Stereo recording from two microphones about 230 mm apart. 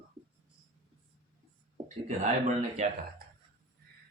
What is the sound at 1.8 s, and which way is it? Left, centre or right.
Speech, right.